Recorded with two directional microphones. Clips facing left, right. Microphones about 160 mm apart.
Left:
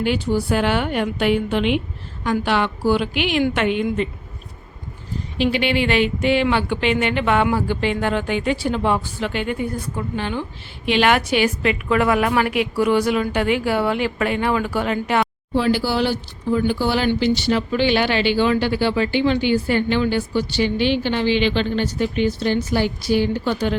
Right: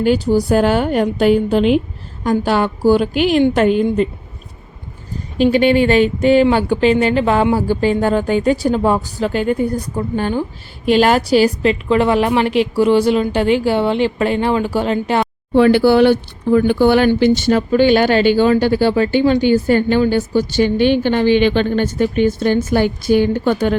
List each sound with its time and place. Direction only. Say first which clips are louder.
0.0 s speech: right 6 dB; 40° right (ahead or behind)
5.4 s a woman's voice: right 7 dB; 45° right (ahead or behind)
15.5 s speech: right 9 dB; 60° right (ahead or behind)